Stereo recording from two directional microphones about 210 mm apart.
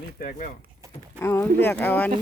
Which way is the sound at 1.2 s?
10° left (ahead or behind).